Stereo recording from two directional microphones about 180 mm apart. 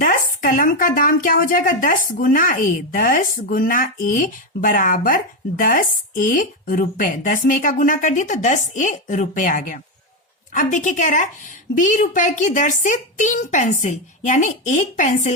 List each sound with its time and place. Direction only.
0.0 s speech: 50° left (ahead or behind)